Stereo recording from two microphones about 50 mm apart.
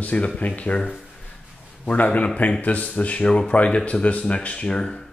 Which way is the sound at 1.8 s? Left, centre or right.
Left.